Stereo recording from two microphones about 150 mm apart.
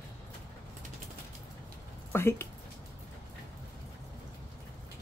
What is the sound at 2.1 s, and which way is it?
Speech, 15° left (ahead or behind).